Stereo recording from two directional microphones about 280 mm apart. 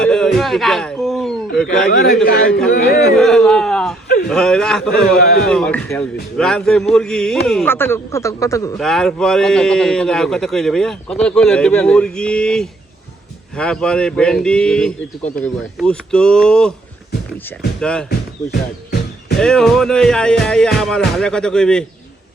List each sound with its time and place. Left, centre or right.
0.0 s a sound: centre
2.2 s speech: left
3.2 s a man's voice: centre
17.7 s speech: centre
19.4 s a man's voice: centre